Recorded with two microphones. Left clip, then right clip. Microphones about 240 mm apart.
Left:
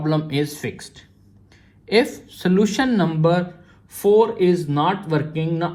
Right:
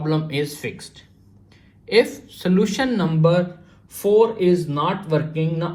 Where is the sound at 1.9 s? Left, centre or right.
Left.